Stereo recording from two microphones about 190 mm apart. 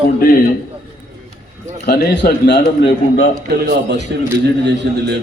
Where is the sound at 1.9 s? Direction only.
55° left (ahead or behind).